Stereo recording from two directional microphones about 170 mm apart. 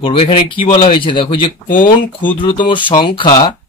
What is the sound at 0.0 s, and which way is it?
Speech, 30° left (ahead or behind).